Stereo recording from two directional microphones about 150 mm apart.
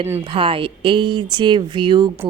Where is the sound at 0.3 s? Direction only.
35° right (ahead or behind).